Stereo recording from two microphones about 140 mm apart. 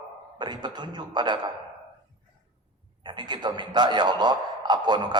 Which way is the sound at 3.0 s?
30° right (ahead or behind).